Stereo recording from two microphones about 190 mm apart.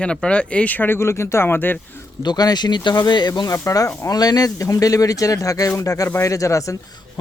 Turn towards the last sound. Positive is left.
turn(degrees=15)  # may be behind; listen again after turning